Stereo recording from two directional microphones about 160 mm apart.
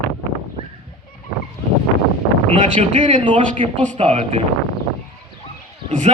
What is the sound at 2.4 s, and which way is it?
Speech, 50° right (ahead or behind).